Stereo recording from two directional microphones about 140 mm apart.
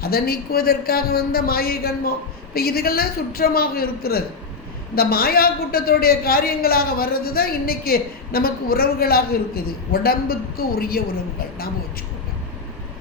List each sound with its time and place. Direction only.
0.0 s a man's voice: 90° left